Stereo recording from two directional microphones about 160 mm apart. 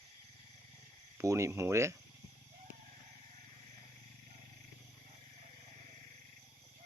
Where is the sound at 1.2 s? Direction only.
20° right (ahead or behind).